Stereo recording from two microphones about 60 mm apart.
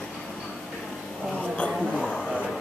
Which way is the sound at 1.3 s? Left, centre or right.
Centre.